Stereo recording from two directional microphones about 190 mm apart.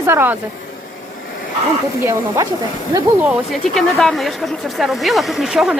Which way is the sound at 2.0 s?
15° right (ahead or behind).